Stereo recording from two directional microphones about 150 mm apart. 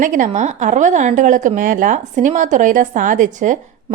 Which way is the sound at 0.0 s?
60° right (ahead or behind).